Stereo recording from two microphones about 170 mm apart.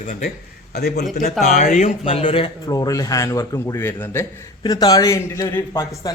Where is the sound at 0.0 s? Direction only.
45° left (ahead or behind).